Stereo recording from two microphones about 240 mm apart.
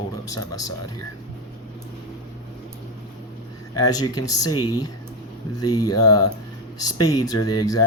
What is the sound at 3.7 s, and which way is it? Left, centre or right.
Speech, centre.